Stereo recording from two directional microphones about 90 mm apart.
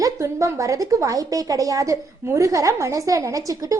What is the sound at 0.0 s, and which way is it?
A child's voice, 35° right (ahead or behind).